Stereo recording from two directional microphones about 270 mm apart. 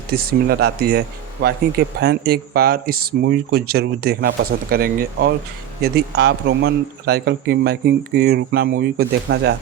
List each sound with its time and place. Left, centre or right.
0.1 s a man's voice: right